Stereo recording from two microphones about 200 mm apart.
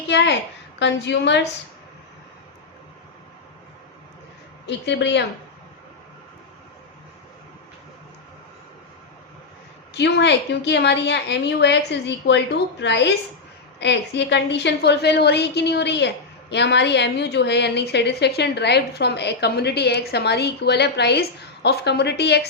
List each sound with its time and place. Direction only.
0.1 s a woman's voice: 60° left (ahead or behind)
4.6 s a woman's voice: 60° left (ahead or behind)
9.9 s a woman's voice: 60° left (ahead or behind)